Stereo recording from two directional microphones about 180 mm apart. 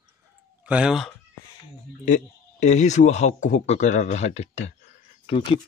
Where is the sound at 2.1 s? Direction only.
40° left (ahead or behind).